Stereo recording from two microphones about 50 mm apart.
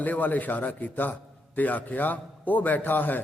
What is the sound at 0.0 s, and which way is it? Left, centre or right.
A man's voice, left.